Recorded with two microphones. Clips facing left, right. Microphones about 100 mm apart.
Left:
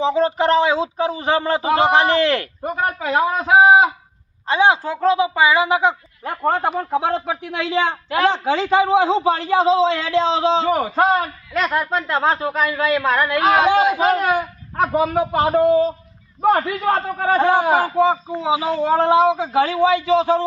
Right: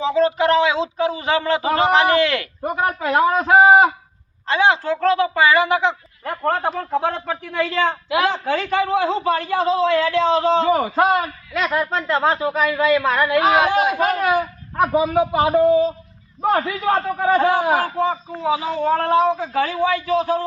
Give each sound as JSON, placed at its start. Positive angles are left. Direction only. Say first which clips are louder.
{"t": 0.0, "sound": "speech", "louder": "even", "side_deg": 30}
{"t": 2.6, "sound": "speech", "louder": "right 1 dB", "side_deg": -20}
{"t": 3.0, "sound": "a man's voice", "louder": "right 3 dB", "side_deg": 15}
{"t": 10.8, "sound": "a man's voice", "louder": "even", "side_deg": -5}
{"t": 12.6, "sound": "a man's voice", "louder": "right 2 dB", "side_deg": 0}
{"t": 14.3, "sound": "speech", "louder": "right 1 dB", "side_deg": -15}
{"t": 16.4, "sound": "a man's voice", "louder": "left 2 dB", "side_deg": 0}
{"t": 17.5, "sound": "speech", "louder": "left 2 dB", "side_deg": 15}